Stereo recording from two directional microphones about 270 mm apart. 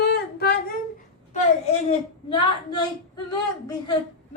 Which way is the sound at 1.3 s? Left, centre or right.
Left.